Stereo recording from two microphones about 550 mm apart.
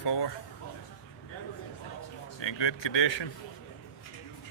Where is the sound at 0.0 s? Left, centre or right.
Left.